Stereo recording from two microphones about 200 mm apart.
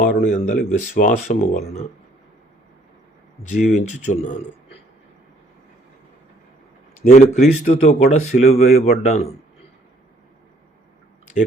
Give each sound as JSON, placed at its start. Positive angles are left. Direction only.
{"t": 0.0, "sound": "speech", "side_deg": 40}
{"t": 3.6, "sound": "speech", "side_deg": 35}
{"t": 7.0, "sound": "speech", "side_deg": 40}